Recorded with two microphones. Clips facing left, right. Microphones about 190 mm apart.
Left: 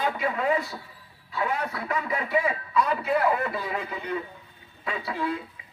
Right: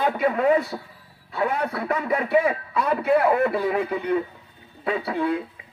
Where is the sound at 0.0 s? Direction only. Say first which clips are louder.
Right 6 dB; 55° right (ahead or behind).